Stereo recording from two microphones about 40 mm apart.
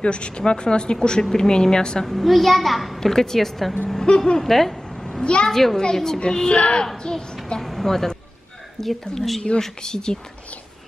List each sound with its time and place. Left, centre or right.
0.0 s speech: left
2.0 s a child's voice: centre
3.0 s a child's voice: centre
5.2 s speech: left
5.5 s a child's voice: centre
5.8 s speech: centre
7.0 s a sound: centre
7.6 s a sound: centre
8.8 s a child's voice: centre